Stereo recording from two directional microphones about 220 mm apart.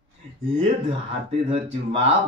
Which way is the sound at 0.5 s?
25° right (ahead or behind).